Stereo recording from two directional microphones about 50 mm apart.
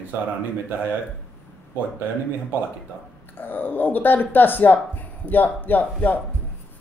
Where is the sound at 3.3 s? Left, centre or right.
Left.